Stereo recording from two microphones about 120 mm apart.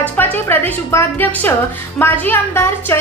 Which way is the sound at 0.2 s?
15° left (ahead or behind).